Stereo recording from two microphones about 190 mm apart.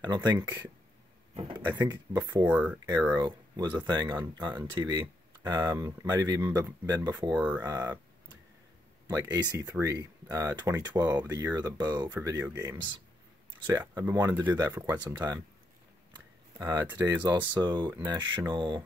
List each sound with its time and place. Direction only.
0.0 s speech: 20° right (ahead or behind)
1.9 s speech: 20° right (ahead or behind)
2.4 s speech: 10° right (ahead or behind)
3.2 s speech: 20° right (ahead or behind)
7.6 s a sound: 20° right (ahead or behind)
9.0 s speech: 15° right (ahead or behind)
16.5 s speech: 10° right (ahead or behind)